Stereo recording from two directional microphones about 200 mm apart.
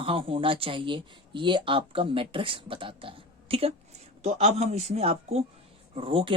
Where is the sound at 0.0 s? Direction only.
25° right (ahead or behind).